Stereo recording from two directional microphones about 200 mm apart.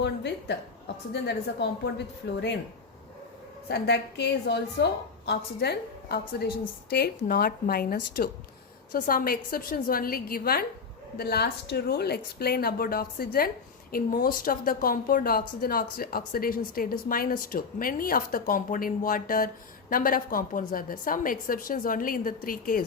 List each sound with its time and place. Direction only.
0.0 s a woman's voice: 60° left (ahead or behind)
3.7 s a woman's voice: 55° left (ahead or behind)